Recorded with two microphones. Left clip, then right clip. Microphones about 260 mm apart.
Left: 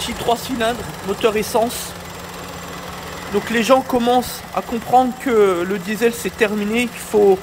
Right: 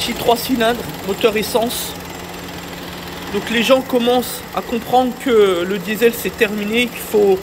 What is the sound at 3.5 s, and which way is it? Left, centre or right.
Speech, left.